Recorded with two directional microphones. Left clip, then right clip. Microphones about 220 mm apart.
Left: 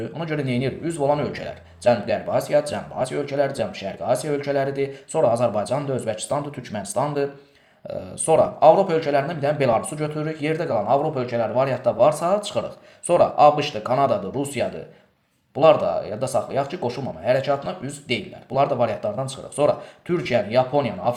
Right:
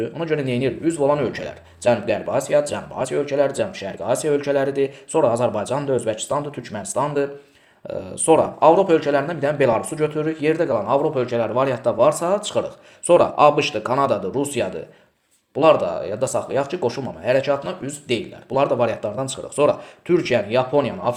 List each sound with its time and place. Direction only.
0.0 s a man's voice: 20° right (ahead or behind)